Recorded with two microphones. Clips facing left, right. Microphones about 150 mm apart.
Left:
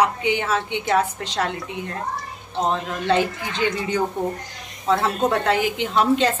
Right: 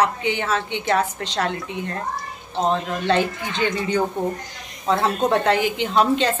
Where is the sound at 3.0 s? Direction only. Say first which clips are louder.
Left 1 dB; 5° left (ahead or behind).